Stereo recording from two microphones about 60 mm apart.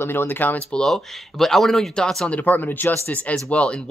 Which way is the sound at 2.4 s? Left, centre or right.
Left.